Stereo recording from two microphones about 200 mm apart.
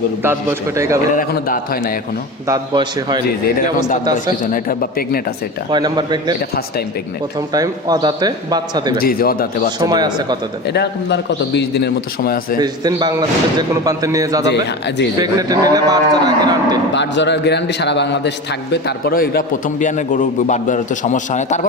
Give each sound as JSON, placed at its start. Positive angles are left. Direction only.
{"t": 1.1, "sound": "a man's voice", "side_deg": 45}
{"t": 2.5, "sound": "a man's voice", "side_deg": -20}
{"t": 4.5, "sound": "a man's voice", "side_deg": 45}
{"t": 5.7, "sound": "a man's voice", "side_deg": -20}
{"t": 7.5, "sound": "a man's voice", "side_deg": -20}
{"t": 9.0, "sound": "a man's voice", "side_deg": 45}
{"t": 9.8, "sound": "a man's voice", "side_deg": -20}
{"t": 10.7, "sound": "a man's voice", "side_deg": 60}
{"t": 12.5, "sound": "a man's voice", "side_deg": -20}
{"t": 14.5, "sound": "a man's voice", "side_deg": 60}
{"t": 15.2, "sound": "a man's voice", "side_deg": -20}
{"t": 16.9, "sound": "a man's voice", "side_deg": 60}